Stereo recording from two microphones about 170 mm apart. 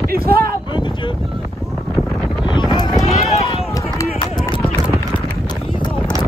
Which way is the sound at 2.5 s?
25° left (ahead or behind).